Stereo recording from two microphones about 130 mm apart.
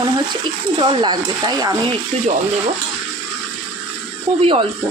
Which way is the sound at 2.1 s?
50° right (ahead or behind).